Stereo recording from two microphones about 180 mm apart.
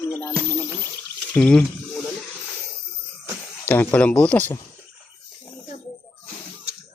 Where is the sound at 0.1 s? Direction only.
15° left (ahead or behind).